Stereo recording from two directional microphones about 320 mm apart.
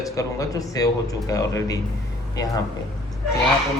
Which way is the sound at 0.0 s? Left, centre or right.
Centre.